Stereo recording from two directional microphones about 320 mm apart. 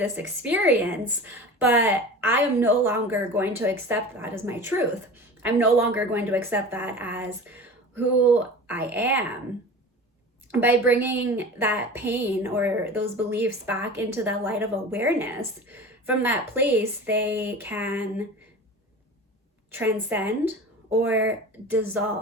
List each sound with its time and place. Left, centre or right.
0.2 s a woman's voice: centre
10.5 s a woman's voice: centre
19.7 s a woman's voice: centre